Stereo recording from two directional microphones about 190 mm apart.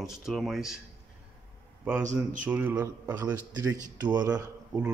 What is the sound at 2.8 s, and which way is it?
A man's voice, 20° right (ahead or behind).